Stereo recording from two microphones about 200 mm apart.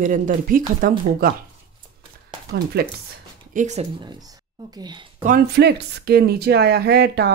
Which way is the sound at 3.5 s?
35° right (ahead or behind).